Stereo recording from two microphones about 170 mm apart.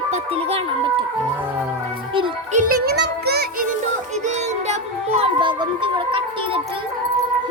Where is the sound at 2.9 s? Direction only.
70° right (ahead or behind).